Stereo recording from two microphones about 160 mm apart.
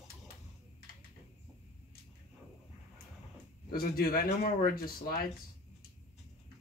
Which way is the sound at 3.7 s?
65° left (ahead or behind).